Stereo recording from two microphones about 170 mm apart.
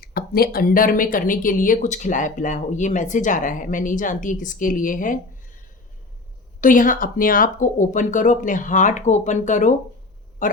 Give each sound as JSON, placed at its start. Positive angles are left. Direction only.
{"t": 0.0, "sound": "speech", "side_deg": 60}
{"t": 6.6, "sound": "speech", "side_deg": 50}